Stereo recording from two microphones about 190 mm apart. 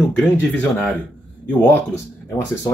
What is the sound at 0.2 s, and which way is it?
Speech, 10° left (ahead or behind).